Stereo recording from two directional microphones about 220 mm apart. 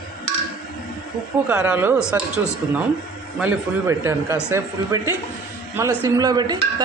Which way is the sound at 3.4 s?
10° right (ahead or behind).